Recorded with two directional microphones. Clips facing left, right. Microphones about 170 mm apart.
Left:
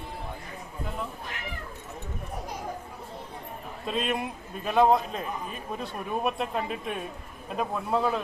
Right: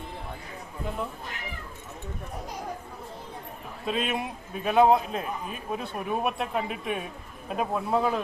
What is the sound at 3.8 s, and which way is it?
A man's voice, centre (ahead or behind).